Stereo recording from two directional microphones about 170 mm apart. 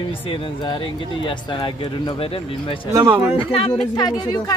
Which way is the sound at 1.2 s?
30° left (ahead or behind).